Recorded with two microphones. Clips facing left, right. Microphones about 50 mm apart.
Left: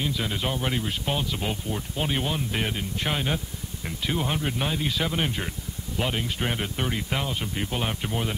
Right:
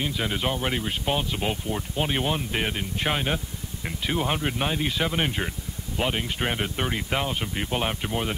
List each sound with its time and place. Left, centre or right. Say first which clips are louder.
0.0 s speech: right 1 dB; centre